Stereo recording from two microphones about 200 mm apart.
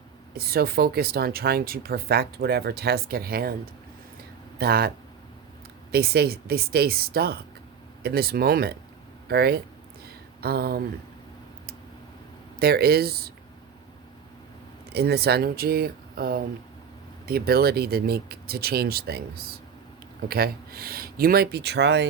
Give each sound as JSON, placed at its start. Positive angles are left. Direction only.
{"t": 0.3, "sound": "speech", "side_deg": -50}
{"t": 4.5, "sound": "speech", "side_deg": -50}
{"t": 5.9, "sound": "speech", "side_deg": -50}
{"t": 12.5, "sound": "speech", "side_deg": -50}
{"t": 14.9, "sound": "speech", "side_deg": -55}